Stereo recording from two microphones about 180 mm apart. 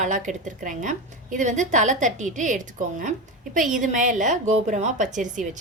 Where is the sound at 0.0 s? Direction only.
45° right (ahead or behind).